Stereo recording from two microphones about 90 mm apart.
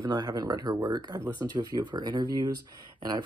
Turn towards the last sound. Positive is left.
turn(degrees=-50)  # may be behind; listen again after turning